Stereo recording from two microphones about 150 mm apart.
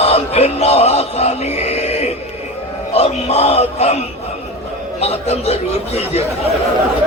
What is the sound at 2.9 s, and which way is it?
A man's voice, 45° left (ahead or behind).